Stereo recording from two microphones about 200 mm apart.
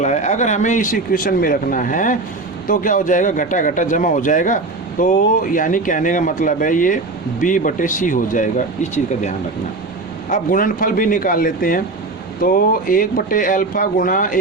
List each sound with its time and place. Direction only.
0.0 s a man's voice: 35° left (ahead or behind)